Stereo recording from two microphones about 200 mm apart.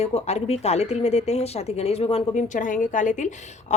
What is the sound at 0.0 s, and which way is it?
Speech, 30° left (ahead or behind).